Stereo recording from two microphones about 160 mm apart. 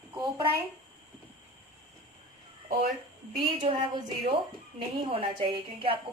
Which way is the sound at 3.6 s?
35° right (ahead or behind).